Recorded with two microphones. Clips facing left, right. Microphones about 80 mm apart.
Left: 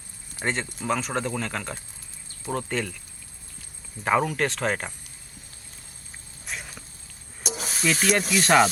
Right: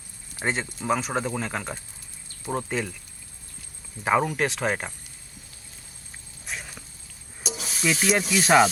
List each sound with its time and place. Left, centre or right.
0.3 s speech: centre
4.0 s speech: centre
6.4 s a sound: centre
7.4 s snake: left
8.3 s speech: centre